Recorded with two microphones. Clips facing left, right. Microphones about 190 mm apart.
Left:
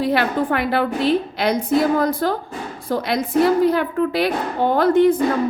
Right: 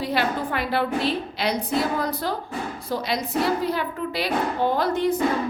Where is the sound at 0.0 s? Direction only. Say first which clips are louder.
Left 5 dB; 55° left (ahead or behind).